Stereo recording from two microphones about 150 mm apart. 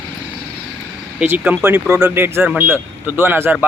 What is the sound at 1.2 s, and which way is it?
Speech, 10° right (ahead or behind).